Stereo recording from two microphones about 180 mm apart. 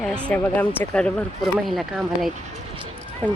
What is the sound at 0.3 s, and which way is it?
Speech, 10° left (ahead or behind).